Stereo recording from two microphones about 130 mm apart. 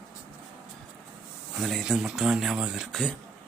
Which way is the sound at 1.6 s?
Centre (ahead or behind).